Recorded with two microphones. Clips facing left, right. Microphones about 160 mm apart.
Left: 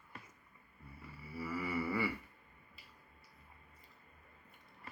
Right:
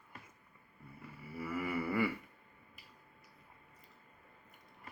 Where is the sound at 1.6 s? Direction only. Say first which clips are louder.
Right 3 dB; 50° right (ahead or behind).